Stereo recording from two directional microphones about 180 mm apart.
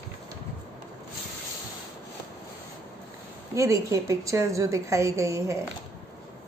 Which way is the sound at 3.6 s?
15° right (ahead or behind).